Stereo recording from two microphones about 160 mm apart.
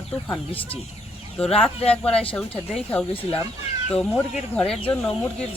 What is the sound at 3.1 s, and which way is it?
Speech, 35° left (ahead or behind).